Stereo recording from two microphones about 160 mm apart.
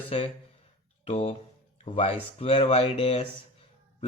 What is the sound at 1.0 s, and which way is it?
Speech, 40° left (ahead or behind).